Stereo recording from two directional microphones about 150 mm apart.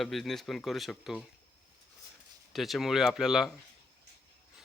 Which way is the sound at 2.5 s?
Centre (ahead or behind).